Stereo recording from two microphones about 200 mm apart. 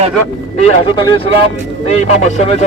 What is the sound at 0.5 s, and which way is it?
Speech, 30° left (ahead or behind).